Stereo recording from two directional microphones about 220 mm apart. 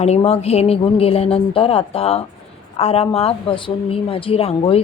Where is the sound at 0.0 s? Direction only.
30° left (ahead or behind).